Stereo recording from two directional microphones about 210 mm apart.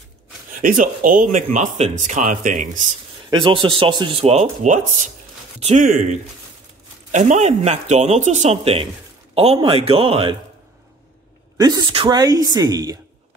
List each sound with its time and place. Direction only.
0.5 s speech: 40° right (ahead or behind)
3.3 s speech: 20° right (ahead or behind)
11.5 s speech: 20° right (ahead or behind)